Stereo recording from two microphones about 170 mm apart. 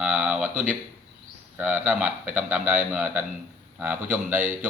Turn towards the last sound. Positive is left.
turn(degrees=-10)  # may be behind; listen again after turning